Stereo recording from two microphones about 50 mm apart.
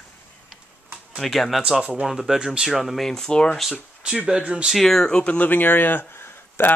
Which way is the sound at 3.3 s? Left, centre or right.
Centre.